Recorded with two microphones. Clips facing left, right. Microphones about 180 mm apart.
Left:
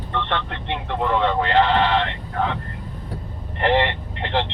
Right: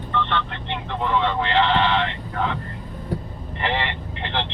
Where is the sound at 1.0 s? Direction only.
50° left (ahead or behind).